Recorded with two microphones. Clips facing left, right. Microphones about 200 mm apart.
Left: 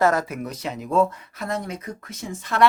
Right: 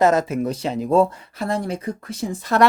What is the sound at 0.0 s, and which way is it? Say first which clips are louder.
Speech: right 4 dB; 20° right (ahead or behind).